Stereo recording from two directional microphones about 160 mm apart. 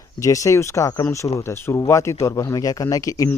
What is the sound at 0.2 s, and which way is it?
Speech, 20° left (ahead or behind).